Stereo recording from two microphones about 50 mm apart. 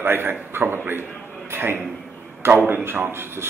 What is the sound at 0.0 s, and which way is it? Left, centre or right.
Speech, right.